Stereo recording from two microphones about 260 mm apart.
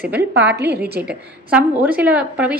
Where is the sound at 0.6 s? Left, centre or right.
Right.